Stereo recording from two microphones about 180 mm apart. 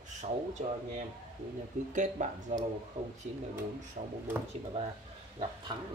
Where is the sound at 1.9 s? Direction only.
45° right (ahead or behind); by 5.8 s 25° right (ahead or behind).